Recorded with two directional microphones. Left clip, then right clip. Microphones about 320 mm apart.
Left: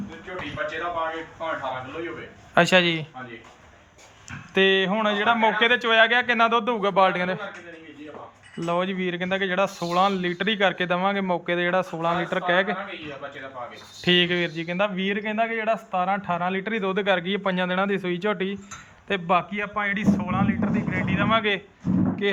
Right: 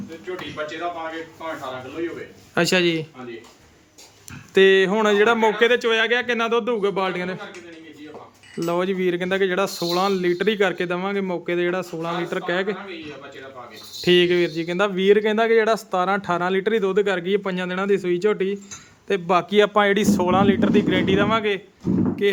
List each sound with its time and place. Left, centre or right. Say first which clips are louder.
2.6 s speech: left 1 dB; centre
4.5 s speech: right 5 dB; centre
8.5 s speech: right 3 dB; centre
14.0 s speech: right 4 dB; centre